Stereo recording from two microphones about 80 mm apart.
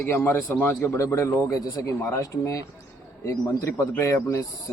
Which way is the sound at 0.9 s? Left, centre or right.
Left.